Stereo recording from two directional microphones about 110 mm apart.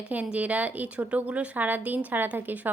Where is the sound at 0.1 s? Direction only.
15° right (ahead or behind).